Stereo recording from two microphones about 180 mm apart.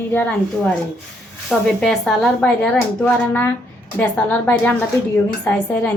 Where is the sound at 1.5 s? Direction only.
Centre (ahead or behind).